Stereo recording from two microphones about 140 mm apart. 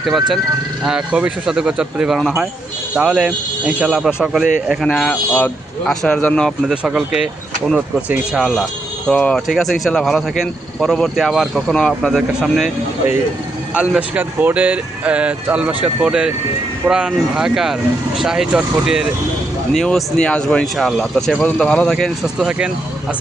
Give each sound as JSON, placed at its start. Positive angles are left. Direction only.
{"t": 0.0, "sound": "speech", "side_deg": 0}
{"t": 6.7, "sound": "speech", "side_deg": -5}
{"t": 13.7, "sound": "speech", "side_deg": -10}